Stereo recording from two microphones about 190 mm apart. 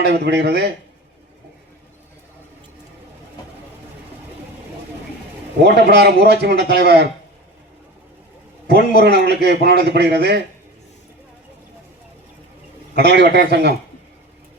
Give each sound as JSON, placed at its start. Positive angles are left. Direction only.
{"t": 0.0, "sound": "a man's voice", "side_deg": -60}
{"t": 5.6, "sound": "a man's voice", "side_deg": -60}
{"t": 9.0, "sound": "a man's voice", "side_deg": -60}
{"t": 13.0, "sound": "a man's voice", "side_deg": -60}